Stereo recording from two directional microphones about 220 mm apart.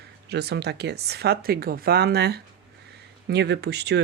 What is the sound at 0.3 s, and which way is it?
Speech, 45° right (ahead or behind).